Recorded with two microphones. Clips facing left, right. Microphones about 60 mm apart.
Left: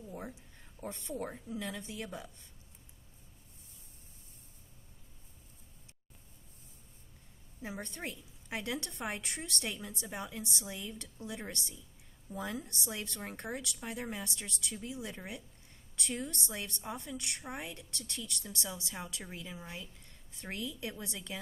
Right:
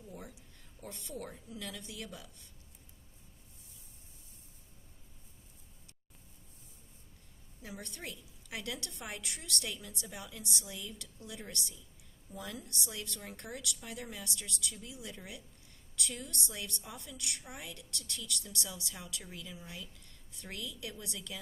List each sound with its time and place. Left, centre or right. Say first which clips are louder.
0.1 s a woman's voice: left 4 dB; left
7.6 s a woman's voice: left 4 dB; left